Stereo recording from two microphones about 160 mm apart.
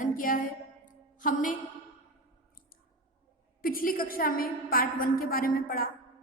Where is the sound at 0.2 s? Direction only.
60° left (ahead or behind).